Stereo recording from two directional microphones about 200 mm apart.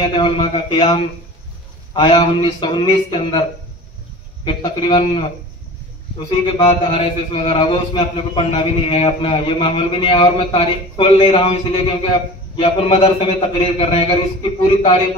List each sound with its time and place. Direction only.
0.0 s a man's voice: 25° left (ahead or behind)
2.0 s a man's voice: 25° left (ahead or behind)
4.5 s a man's voice: 25° left (ahead or behind)